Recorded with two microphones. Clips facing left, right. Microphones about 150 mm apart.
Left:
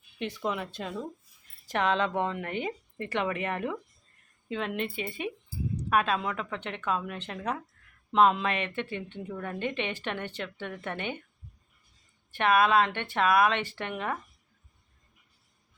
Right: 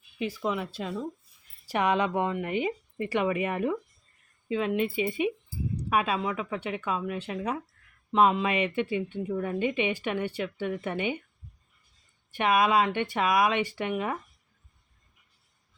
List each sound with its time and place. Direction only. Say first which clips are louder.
0.2 s a woman's voice: right 2 dB; 5° right (ahead or behind)
12.3 s a woman's voice: even; 10° right (ahead or behind)